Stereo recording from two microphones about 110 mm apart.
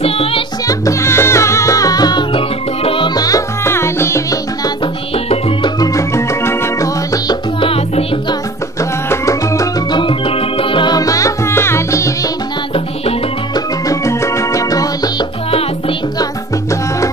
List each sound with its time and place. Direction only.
0.0 s music: 65° left (ahead or behind)
0.7 s music: 30° left (ahead or behind)
2.3 s music: 55° left (ahead or behind)
3.2 s music: 30° left (ahead or behind)
5.9 s music: 25° left (ahead or behind)
7.6 s music: 60° left (ahead or behind)
9.1 s music: 30° left (ahead or behind)
9.8 s music: 45° left (ahead or behind)
11.0 s music: 30° left (ahead or behind)
13.8 s music: 25° left (ahead or behind)